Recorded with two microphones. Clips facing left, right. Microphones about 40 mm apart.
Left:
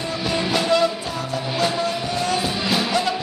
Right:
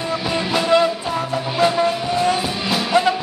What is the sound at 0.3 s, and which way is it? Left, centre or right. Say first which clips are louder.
Music: even; centre.